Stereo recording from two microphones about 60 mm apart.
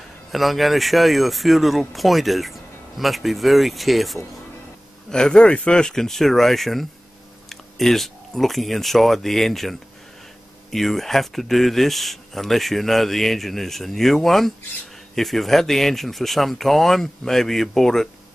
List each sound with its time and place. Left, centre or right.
0.3 s speech: centre
5.1 s speech: centre